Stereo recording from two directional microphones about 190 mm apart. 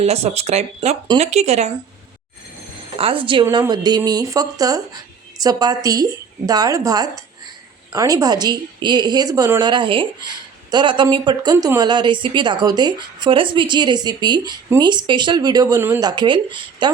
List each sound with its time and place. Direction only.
0.0 s speech: 35° right (ahead or behind)
3.0 s a woman's voice: 30° right (ahead or behind)